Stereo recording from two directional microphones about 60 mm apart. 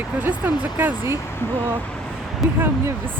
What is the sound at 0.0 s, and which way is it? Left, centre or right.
Speech, right.